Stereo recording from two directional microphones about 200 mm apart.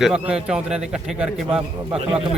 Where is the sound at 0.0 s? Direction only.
5° right (ahead or behind).